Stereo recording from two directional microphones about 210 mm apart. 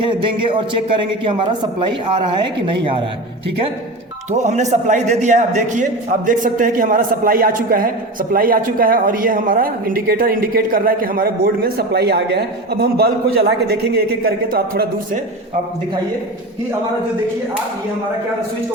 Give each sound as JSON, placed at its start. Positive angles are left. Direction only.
{"t": 0.0, "sound": "a man's voice", "side_deg": -25}
{"t": 4.3, "sound": "a man's voice", "side_deg": -35}